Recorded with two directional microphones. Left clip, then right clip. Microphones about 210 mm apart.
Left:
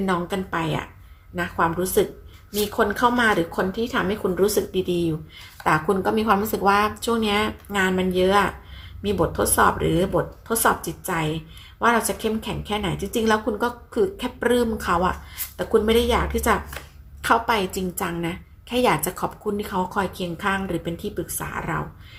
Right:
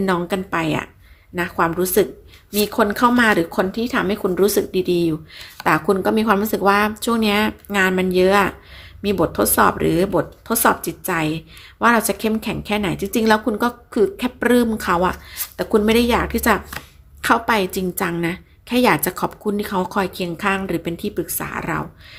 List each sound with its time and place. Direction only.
0.0 s speech: 45° right (ahead or behind)